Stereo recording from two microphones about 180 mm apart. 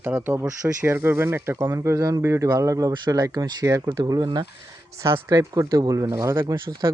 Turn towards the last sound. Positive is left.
turn(degrees=-25)  # may be behind; listen again after turning